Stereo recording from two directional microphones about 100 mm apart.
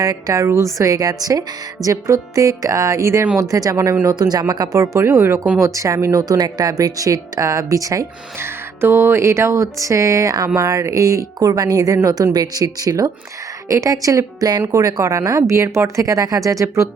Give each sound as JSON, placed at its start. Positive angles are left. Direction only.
{"t": 0.0, "sound": "speech", "side_deg": -35}
{"t": 8.8, "sound": "speech", "side_deg": -25}